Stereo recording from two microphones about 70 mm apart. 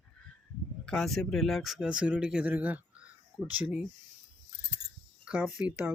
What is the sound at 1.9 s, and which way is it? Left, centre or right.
Speech, centre.